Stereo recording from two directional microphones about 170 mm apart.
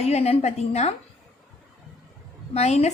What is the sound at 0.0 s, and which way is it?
Speech, 40° left (ahead or behind).